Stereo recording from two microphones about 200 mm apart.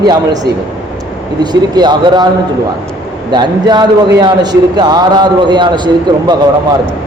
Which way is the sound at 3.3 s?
20° right (ahead or behind).